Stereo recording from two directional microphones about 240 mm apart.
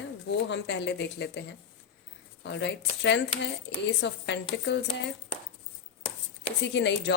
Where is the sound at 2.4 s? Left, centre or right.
Left.